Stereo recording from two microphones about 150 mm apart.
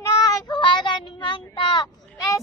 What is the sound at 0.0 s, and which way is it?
Child singing, 30° left (ahead or behind).